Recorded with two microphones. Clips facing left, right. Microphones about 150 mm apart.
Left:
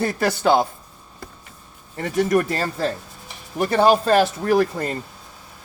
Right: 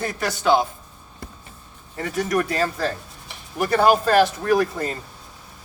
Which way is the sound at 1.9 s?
30° left (ahead or behind).